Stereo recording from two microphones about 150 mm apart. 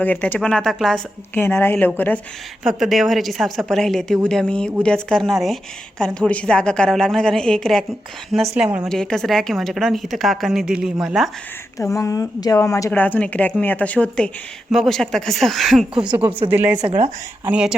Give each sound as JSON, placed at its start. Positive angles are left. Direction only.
{"t": 0.0, "sound": "a woman's voice", "side_deg": 10}
{"t": 1.3, "sound": "speech", "side_deg": 15}
{"t": 2.6, "sound": "a woman's voice", "side_deg": -5}
{"t": 8.9, "sound": "a woman's voice", "side_deg": 5}
{"t": 11.8, "sound": "a woman's voice", "side_deg": 20}
{"t": 17.4, "sound": "speech", "side_deg": -5}